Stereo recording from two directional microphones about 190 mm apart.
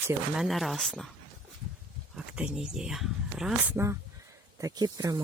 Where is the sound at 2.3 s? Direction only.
5° right (ahead or behind).